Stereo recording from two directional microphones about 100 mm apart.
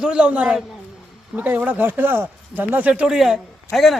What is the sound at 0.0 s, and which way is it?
Speech, 10° right (ahead or behind).